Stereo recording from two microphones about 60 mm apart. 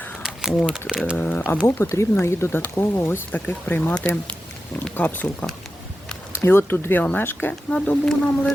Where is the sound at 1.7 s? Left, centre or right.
Left.